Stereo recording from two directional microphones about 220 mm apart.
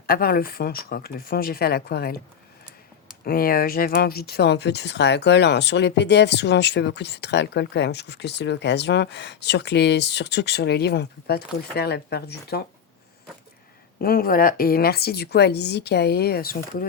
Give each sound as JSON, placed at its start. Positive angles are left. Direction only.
{"t": 0.1, "sound": "speech", "side_deg": 45}
{"t": 3.2, "sound": "speech", "side_deg": 40}
{"t": 14.0, "sound": "speech", "side_deg": 40}